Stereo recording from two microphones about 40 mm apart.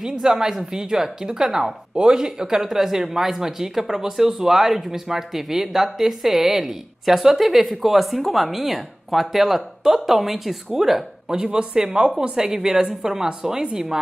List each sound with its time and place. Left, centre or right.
0.0 s a woman's voice: centre